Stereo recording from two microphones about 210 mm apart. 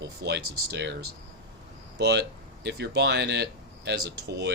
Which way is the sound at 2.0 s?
50° right (ahead or behind).